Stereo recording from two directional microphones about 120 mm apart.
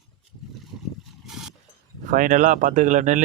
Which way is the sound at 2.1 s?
90° right.